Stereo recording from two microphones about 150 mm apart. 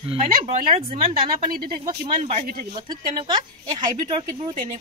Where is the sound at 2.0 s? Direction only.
50° right (ahead or behind).